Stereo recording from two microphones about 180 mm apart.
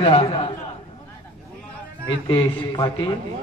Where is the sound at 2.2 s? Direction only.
20° left (ahead or behind).